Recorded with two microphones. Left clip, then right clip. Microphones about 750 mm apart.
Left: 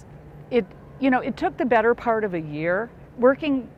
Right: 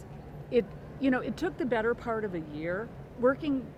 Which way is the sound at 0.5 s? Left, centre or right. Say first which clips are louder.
Left 5 dB; left.